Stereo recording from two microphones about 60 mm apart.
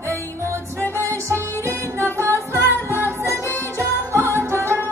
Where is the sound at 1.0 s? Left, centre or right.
Right.